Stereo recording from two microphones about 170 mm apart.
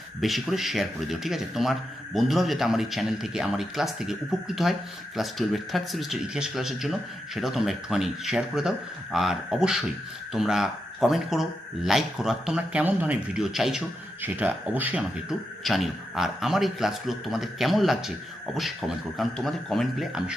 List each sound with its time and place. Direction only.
0.2 s speech: centre (ahead or behind)